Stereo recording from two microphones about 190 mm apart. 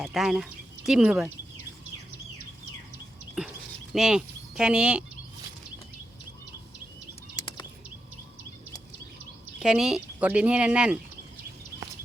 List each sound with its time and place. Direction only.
0.0 s speech: centre (ahead or behind)
3.9 s speech: centre (ahead or behind)
7.3 s bird flight: 20° left (ahead or behind)
9.6 s speech: 5° right (ahead or behind)